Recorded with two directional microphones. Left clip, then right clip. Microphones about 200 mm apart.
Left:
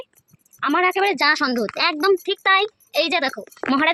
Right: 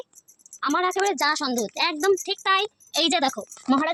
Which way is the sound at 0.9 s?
35° left (ahead or behind).